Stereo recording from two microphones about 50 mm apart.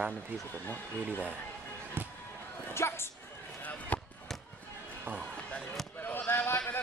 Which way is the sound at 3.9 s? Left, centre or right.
Left.